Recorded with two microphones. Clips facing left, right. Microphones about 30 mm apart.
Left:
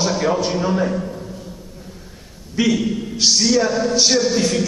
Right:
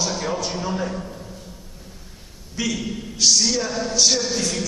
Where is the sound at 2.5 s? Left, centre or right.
Centre.